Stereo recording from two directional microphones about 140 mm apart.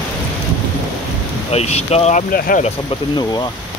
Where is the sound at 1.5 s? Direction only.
50° left (ahead or behind).